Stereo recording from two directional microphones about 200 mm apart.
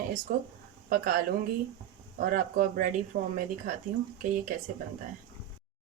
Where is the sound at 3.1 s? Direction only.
55° right (ahead or behind).